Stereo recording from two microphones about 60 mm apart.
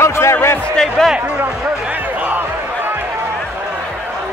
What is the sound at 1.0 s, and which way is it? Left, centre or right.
Speech, centre.